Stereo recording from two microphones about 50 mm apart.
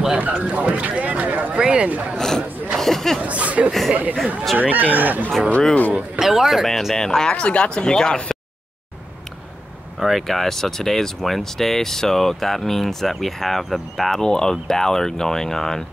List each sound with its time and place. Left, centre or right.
0.2 s speech: right
2.1 s speech: centre
3.2 s speech: right
5.9 s speech: centre
6.6 s speech: centre
9.9 s speech: centre
14.2 s speech: centre